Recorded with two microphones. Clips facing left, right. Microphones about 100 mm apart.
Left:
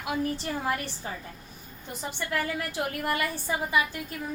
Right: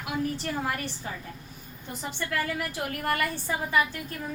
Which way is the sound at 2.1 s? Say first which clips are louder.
Even; 15° left (ahead or behind).